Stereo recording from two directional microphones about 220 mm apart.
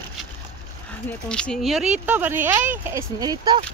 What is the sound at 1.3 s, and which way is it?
Speech, 5° left (ahead or behind).